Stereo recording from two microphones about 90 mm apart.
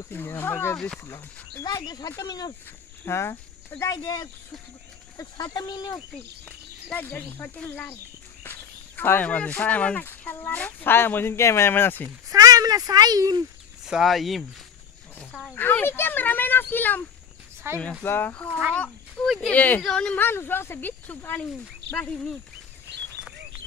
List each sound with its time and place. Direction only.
0.1 s speech: 25° left (ahead or behind)
0.7 s speech: 10° left (ahead or behind)
1.0 s speech: 40° left (ahead or behind)
3.1 s speech: 30° left (ahead or behind)
4.0 s speech: 45° left (ahead or behind)
6.4 s speech: 20° left (ahead or behind)
12.3 s speech: 40° right (ahead or behind)
13.8 s speech: 5° right (ahead or behind)
15.5 s speech: 20° left (ahead or behind)
17.6 s speech: 30° right (ahead or behind)
18.0 s speech: 25° left (ahead or behind)
18.3 s speech: 15° left (ahead or behind)
20.2 s speech: 25° left (ahead or behind)